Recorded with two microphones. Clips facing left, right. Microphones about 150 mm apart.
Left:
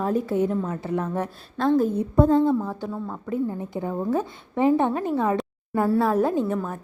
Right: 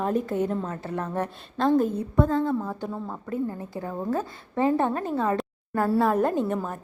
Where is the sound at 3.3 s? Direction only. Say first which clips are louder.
Left 3 dB; 15° left (ahead or behind); by 6.8 s 5° right (ahead or behind).